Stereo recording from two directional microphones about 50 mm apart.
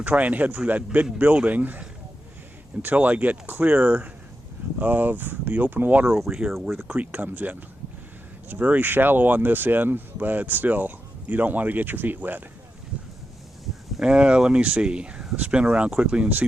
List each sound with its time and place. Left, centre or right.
0.0 s speech: right
2.8 s speech: right
6.1 s speech: centre
6.8 s speech: right
8.5 s speech: right
14.0 s speech: centre